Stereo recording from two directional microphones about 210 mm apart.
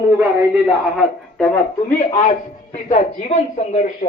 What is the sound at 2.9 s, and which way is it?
Speech, 35° left (ahead or behind).